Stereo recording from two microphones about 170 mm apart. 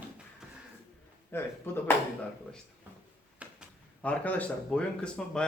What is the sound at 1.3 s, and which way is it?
Speech, 15° left (ahead or behind).